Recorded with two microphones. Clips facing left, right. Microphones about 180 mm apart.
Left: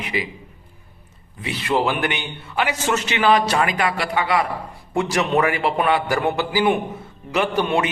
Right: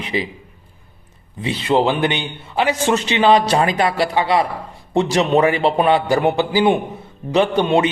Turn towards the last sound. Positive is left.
turn(degrees=-20)  # may be behind; listen again after turning